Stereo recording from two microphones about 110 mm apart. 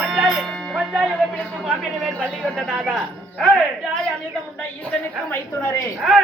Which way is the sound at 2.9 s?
Centre (ahead or behind).